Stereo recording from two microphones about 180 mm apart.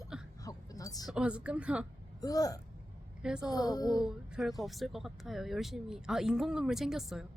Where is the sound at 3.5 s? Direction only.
20° left (ahead or behind).